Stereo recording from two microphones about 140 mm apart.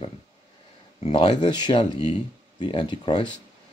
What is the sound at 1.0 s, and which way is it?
Speech, 50° left (ahead or behind).